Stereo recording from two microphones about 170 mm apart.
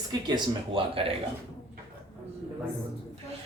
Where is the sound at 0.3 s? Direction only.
25° right (ahead or behind).